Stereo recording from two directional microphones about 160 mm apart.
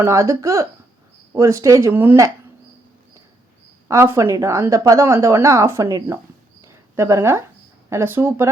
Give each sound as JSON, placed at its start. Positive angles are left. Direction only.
{"t": 0.0, "sound": "speech", "side_deg": -20}
{"t": 3.8, "sound": "speech", "side_deg": -20}
{"t": 6.7, "sound": "a sound", "side_deg": -15}
{"t": 7.9, "sound": "speech", "side_deg": -15}